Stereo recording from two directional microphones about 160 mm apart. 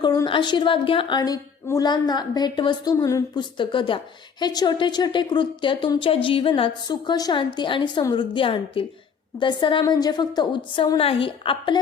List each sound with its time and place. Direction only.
0.0 s a woman's voice: 25° left (ahead or behind)